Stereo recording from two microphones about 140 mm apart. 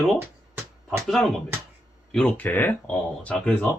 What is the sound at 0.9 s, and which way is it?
Speech, centre (ahead or behind).